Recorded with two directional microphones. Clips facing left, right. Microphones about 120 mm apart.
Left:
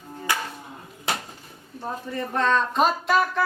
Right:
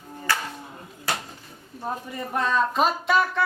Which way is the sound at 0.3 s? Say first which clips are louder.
Even; 15° left (ahead or behind).